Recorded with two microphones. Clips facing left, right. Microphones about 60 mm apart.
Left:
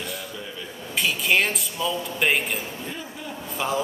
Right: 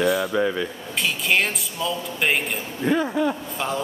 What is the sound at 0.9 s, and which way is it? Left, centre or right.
Speech, centre.